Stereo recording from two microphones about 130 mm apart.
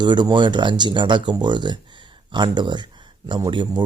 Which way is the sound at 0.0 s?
35° right (ahead or behind).